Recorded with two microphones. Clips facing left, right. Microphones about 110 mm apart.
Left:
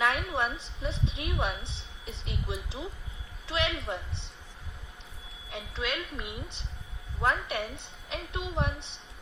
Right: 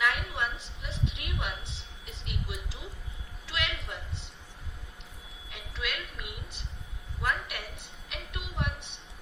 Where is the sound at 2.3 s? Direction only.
25° left (ahead or behind).